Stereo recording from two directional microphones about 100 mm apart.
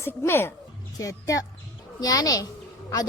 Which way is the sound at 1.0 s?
35° left (ahead or behind).